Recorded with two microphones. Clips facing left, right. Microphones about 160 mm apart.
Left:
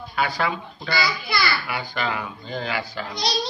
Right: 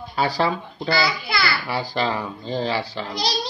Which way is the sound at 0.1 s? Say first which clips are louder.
Right 3 dB; 30° right (ahead or behind).